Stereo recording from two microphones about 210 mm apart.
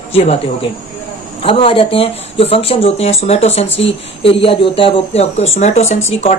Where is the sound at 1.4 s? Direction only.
25° left (ahead or behind).